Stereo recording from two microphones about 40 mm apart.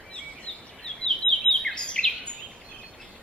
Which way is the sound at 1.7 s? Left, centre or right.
Left.